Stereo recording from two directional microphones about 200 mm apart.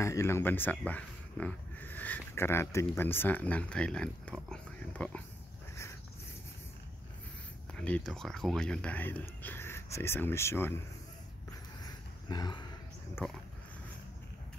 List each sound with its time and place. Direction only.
0.0 s speech: 15° left (ahead or behind)
7.7 s speech: 5° left (ahead or behind)
11.8 s a sound: 20° left (ahead or behind)
13.2 s speech: 5° left (ahead or behind)